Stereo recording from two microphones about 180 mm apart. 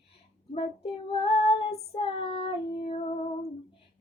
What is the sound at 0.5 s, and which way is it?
Child singing, 30° left (ahead or behind).